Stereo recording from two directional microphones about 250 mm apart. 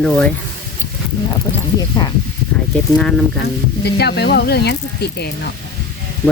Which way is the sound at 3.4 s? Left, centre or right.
Left.